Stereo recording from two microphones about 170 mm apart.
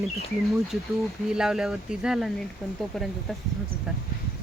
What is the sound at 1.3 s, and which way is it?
Speech, centre (ahead or behind).